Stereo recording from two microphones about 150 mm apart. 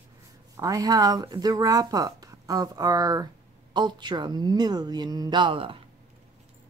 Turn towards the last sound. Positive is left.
turn(degrees=-35)  # may be behind; listen again after turning